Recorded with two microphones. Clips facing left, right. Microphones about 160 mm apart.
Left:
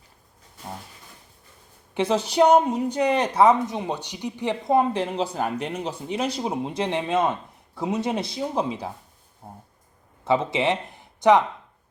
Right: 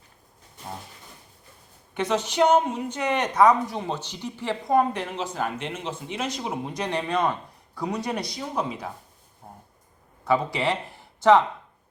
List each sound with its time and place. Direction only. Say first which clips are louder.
2.0 s a woman's voice: left 3 dB; 30° left (ahead or behind)
9.4 s a sound: left 3 dB; 30° left (ahead or behind)
10.2 s speech: left 2 dB; 20° left (ahead or behind)